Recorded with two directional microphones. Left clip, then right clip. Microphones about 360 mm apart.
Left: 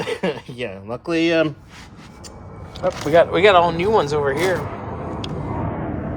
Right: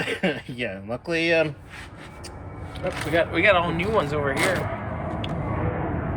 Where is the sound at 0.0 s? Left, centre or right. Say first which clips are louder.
Left 2 dB; left.